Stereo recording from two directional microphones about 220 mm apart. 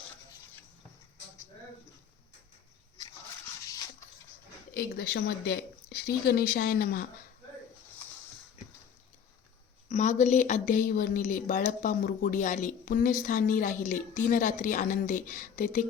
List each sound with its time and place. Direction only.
4.7 s speech: 45° left (ahead or behind)
9.9 s speech: 35° left (ahead or behind)